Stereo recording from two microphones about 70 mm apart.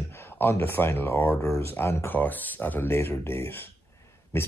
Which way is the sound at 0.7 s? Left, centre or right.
Left.